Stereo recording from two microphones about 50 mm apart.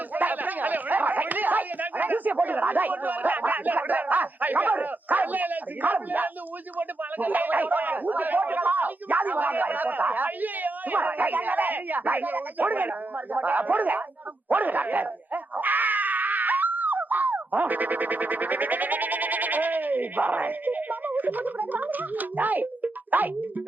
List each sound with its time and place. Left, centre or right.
0.1 s snicker: right
6.7 s a sound: right
14.5 s dog: right